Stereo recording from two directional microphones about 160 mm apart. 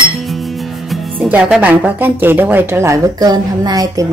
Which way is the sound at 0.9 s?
10° right (ahead or behind).